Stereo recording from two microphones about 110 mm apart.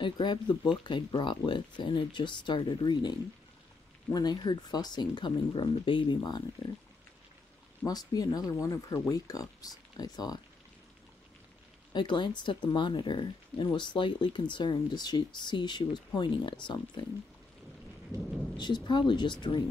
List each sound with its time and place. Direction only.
0.0 s speech: 45° left (ahead or behind)
7.8 s speech: 35° left (ahead or behind)
11.9 s speech: 45° left (ahead or behind)
18.6 s speech: 45° left (ahead or behind)